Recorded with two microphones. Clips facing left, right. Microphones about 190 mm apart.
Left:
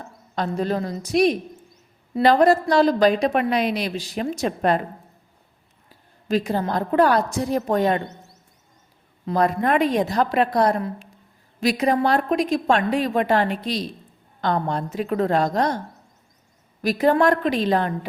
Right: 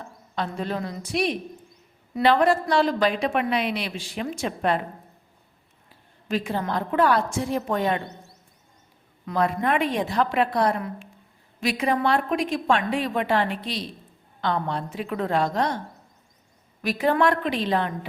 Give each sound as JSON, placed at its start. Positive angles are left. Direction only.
{"t": 0.3, "sound": "a woman's voice", "side_deg": 40}
{"t": 6.2, "sound": "a woman's voice", "side_deg": 40}
{"t": 9.2, "sound": "a woman's voice", "side_deg": 40}
{"t": 16.8, "sound": "a woman's voice", "side_deg": 40}